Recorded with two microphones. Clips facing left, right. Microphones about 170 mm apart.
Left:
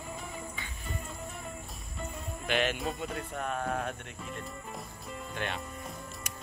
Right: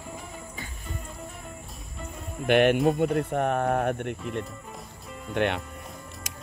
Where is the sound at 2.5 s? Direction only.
55° right (ahead or behind).